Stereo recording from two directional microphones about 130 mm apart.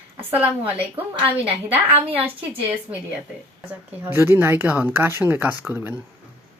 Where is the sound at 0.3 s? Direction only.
10° right (ahead or behind).